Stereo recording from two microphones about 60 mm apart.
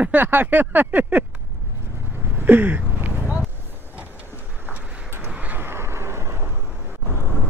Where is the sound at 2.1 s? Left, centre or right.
Right.